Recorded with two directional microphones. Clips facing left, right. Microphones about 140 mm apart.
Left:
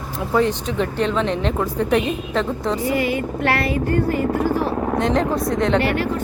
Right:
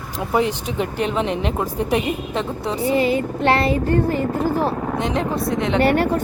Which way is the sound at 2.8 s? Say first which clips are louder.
Right 5 dB; 25° right (ahead or behind).